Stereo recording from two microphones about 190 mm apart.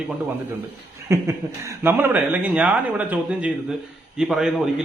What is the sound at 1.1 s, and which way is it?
Speech, 15° right (ahead or behind).